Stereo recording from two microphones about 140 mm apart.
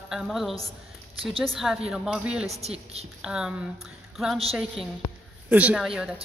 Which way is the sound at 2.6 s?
45° right (ahead or behind).